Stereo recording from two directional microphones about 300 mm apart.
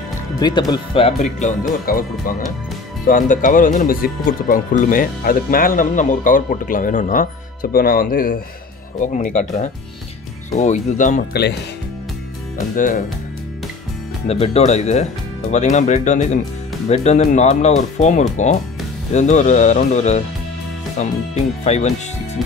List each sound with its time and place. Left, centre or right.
0.4 s speech: centre; by 11.5 s left
12.5 s speech: left
14.2 s speech: left